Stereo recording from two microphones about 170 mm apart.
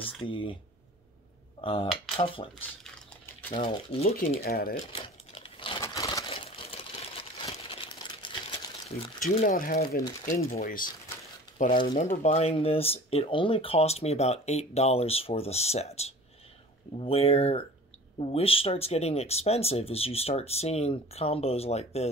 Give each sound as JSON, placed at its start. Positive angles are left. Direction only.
{"t": 0.0, "sound": "speech", "side_deg": 30}
{"t": 1.6, "sound": "cutlery", "side_deg": 30}
{"t": 2.1, "sound": "dishes", "side_deg": 30}
{"t": 3.6, "sound": "speech", "side_deg": 30}
{"t": 4.4, "sound": "speech", "side_deg": 60}
{"t": 4.9, "sound": "crumpling", "side_deg": 30}
{"t": 5.8, "sound": "a sound", "side_deg": 20}
{"t": 6.3, "sound": "sewing machine", "side_deg": 35}
{"t": 7.4, "sound": "crumpling", "side_deg": 35}
{"t": 9.4, "sound": "speech", "side_deg": 60}